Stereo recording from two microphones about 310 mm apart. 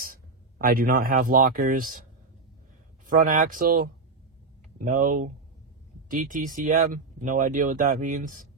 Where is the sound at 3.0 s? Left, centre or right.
Right.